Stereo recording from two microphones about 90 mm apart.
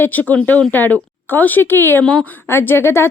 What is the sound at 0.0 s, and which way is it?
A woman's voice, 20° left (ahead or behind).